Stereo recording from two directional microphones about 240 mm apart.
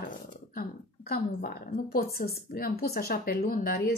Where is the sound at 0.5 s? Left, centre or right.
Left.